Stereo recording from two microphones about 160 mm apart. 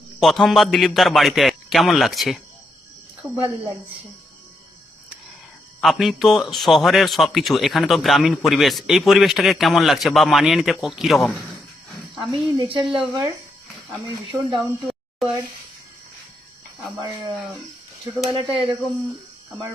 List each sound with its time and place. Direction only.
0.2 s a man's voice: centre (ahead or behind)
5.8 s a man's voice: centre (ahead or behind)
12.5 s speech: 30° right (ahead or behind)
17.0 s speech: 30° right (ahead or behind)